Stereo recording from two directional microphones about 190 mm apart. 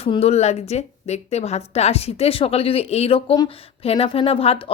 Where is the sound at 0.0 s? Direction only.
30° left (ahead or behind).